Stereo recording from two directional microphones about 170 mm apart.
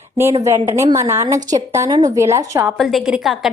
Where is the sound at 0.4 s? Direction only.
15° right (ahead or behind).